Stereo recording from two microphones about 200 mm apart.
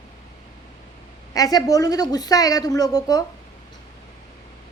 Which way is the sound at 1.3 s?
20° left (ahead or behind).